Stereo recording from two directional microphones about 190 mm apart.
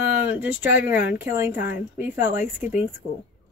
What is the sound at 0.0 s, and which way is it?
A woman's voice, 10° right (ahead or behind).